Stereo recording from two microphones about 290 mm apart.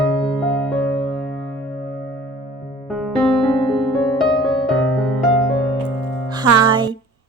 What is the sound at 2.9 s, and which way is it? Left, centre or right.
Music, centre.